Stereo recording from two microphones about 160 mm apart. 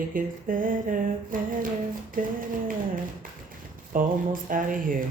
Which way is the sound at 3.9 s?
60° right (ahead or behind).